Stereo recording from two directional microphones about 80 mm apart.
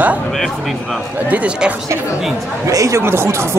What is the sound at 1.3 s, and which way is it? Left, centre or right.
Speech, centre.